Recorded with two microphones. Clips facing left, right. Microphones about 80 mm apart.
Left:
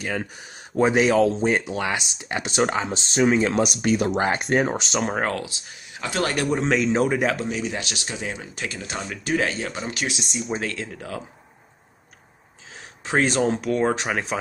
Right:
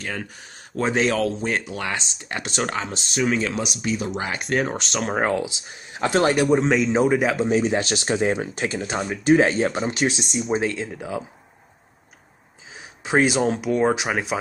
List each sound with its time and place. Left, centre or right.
0.0 s speech: centre
3.5 s speech: left
4.4 s a man's voice: centre
5.2 s speech: centre
5.7 s speech: right
6.3 s a man's voice: centre
7.4 s speech: right
10.4 s a man's voice: centre
10.9 s speech: centre
12.7 s speech: centre